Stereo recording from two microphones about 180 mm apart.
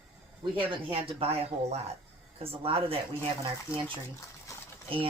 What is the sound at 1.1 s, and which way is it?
Speech, 35° right (ahead or behind).